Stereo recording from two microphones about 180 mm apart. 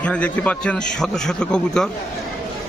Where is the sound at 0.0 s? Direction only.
5° left (ahead or behind).